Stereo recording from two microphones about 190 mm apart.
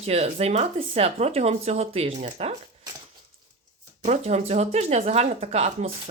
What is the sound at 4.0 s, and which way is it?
Speech, 35° right (ahead or behind).